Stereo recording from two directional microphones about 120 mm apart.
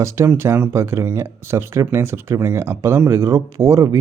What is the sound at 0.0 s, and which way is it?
Speech, 20° right (ahead or behind).